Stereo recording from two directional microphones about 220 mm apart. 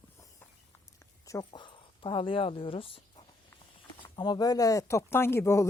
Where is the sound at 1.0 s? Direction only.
15° left (ahead or behind).